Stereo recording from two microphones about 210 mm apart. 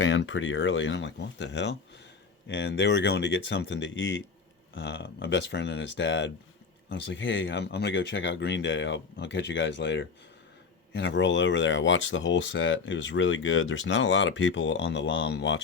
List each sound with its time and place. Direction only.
0.0 s speech: 65° left (ahead or behind)